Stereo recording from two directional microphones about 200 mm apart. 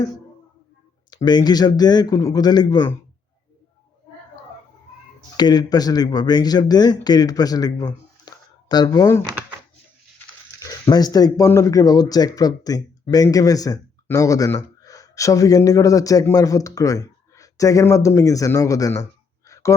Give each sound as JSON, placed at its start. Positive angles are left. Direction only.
{"t": 1.1, "sound": "speech", "side_deg": 20}
{"t": 5.4, "sound": "speech", "side_deg": 20}
{"t": 10.6, "sound": "speech", "side_deg": 20}
{"t": 19.5, "sound": "a sound", "side_deg": 15}